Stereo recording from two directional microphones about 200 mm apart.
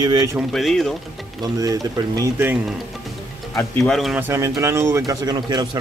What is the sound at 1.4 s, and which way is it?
Speech, 20° right (ahead or behind).